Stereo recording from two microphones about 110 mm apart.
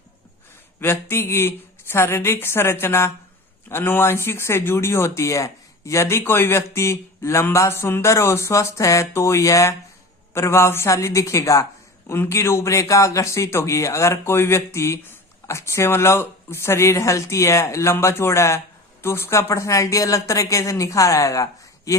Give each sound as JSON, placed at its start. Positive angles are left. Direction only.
{"t": 0.8, "sound": "speech", "side_deg": 20}